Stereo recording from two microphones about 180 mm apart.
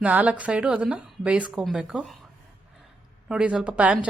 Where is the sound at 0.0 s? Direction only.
10° right (ahead or behind).